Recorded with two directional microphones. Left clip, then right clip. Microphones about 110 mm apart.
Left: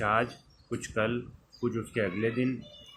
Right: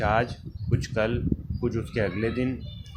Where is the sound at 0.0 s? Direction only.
40° right (ahead or behind).